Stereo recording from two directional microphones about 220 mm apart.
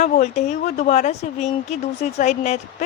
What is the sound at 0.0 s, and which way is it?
Speech, 30° left (ahead or behind).